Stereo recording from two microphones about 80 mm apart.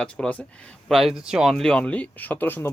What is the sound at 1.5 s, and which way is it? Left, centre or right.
Speech, centre.